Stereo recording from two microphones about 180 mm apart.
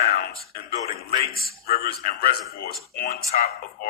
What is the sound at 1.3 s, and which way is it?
Speech, 60° left (ahead or behind).